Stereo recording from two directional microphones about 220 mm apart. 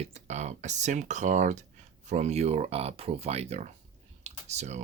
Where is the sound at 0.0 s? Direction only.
30° right (ahead or behind).